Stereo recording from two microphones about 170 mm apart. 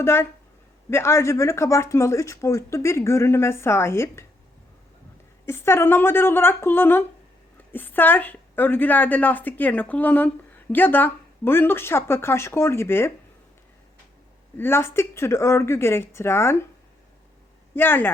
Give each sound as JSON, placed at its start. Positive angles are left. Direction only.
{"t": 0.0, "sound": "a woman's voice", "side_deg": 15}
{"t": 5.5, "sound": "a woman's voice", "side_deg": 15}
{"t": 14.5, "sound": "a woman's voice", "side_deg": 15}
{"t": 17.7, "sound": "a woman's voice", "side_deg": 15}